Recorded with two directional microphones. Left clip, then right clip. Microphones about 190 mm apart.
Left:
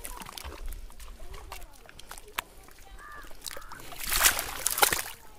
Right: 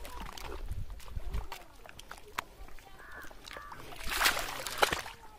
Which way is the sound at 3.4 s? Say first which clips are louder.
Left 5 dB; 55° left (ahead or behind).